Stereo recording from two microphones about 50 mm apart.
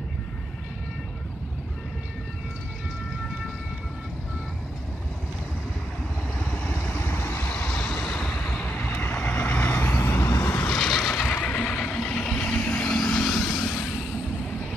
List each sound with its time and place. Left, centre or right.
6.4 s vehicle: left
7.5 s vehicle: left
8.0 s vehicle: centre
8.6 s vehicle: left
9.9 s vehicle: left
10.9 s neigh: centre
11.3 s vehicle: left
11.7 s vehicle: centre
12.5 s vehicle: left
12.9 s vehicle: centre